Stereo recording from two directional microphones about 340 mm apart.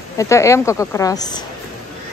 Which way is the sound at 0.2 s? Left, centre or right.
Centre.